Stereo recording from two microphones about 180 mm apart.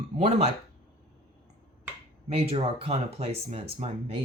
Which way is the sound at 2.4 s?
35° right (ahead or behind).